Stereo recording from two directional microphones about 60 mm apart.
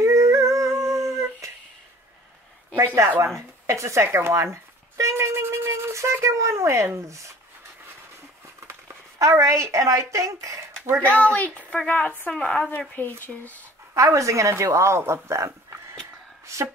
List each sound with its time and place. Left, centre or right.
0.0 s a sound: right
1.0 s dog: right
2.7 s speech: right
8.5 s speech: right
11.0 s a woman's voice: left
13.9 s a woman's voice: right
15.2 s a sound: right